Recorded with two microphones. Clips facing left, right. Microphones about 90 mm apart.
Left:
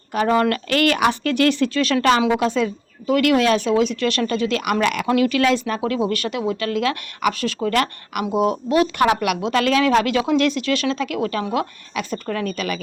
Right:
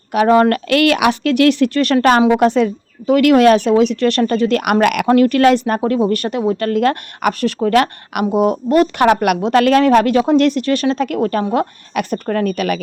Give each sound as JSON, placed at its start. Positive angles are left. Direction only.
{"t": 0.1, "sound": "speech", "side_deg": -60}
{"t": 5.8, "sound": "speech", "side_deg": -40}